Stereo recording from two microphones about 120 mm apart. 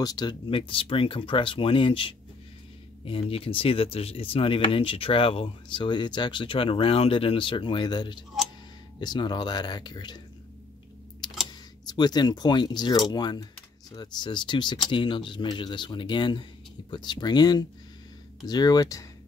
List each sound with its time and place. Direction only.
0.0 s speech: 35° left (ahead or behind)
11.8 s speech: 35° left (ahead or behind)